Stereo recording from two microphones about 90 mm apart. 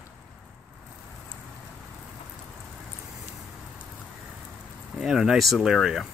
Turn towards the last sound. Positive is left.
turn(degrees=-5)  # may be behind; listen again after turning